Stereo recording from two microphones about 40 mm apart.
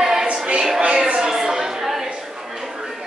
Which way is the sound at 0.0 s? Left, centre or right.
Centre.